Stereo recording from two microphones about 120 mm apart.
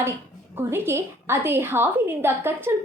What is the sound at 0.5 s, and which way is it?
A woman's voice, 20° right (ahead or behind).